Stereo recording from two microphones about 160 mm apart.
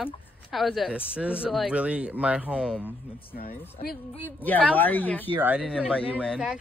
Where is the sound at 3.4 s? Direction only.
70° left (ahead or behind).